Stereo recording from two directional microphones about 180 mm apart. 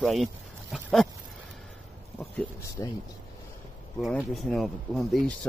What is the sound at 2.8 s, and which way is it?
Speech, 20° left (ahead or behind).